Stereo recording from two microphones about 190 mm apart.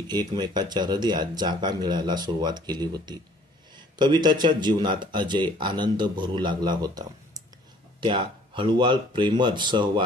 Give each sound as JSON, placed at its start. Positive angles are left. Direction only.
{"t": 0.0, "sound": "speech", "side_deg": -20}